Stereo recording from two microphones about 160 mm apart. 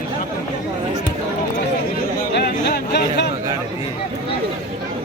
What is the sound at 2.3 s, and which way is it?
Chatter, 90° left.